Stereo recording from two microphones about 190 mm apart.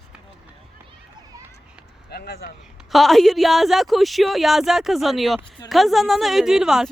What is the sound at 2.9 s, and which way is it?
Speech, centre (ahead or behind).